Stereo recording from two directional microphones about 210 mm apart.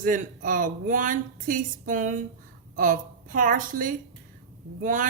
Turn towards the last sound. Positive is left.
turn(degrees=-40)  # may be behind; listen again after turning